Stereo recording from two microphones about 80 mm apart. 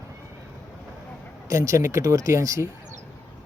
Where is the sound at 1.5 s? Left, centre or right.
Right.